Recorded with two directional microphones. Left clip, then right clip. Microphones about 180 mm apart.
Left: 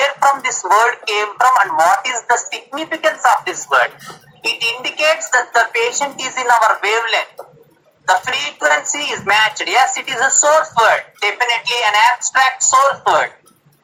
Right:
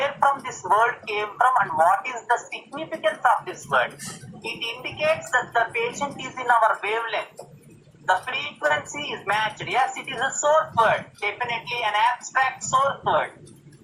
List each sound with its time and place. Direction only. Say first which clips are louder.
0.0 s speech: left 8 dB; 40° left (ahead or behind)